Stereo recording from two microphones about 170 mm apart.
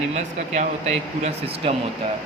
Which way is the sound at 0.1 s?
40° right (ahead or behind).